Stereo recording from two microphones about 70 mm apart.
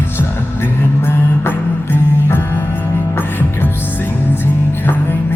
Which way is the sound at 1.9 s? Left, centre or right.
Left.